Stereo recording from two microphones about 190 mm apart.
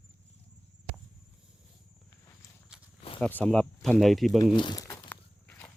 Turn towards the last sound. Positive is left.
turn(degrees=10)  # may be behind; listen again after turning